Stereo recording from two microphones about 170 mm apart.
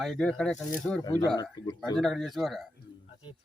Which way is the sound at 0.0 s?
5° left (ahead or behind).